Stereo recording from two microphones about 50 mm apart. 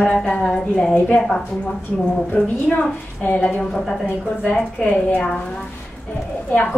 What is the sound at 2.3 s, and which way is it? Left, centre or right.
A woman's voice, left.